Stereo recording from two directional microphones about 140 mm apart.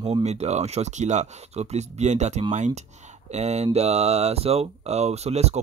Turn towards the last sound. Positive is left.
turn(degrees=-50)  # may be behind; listen again after turning